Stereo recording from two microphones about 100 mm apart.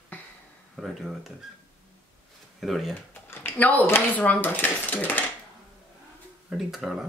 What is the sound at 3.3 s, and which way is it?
Speech, 20° left (ahead or behind).